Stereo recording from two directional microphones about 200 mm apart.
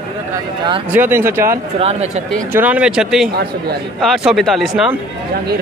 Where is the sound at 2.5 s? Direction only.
5° right (ahead or behind).